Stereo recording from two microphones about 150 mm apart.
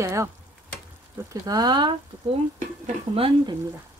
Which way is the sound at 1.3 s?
25° right (ahead or behind).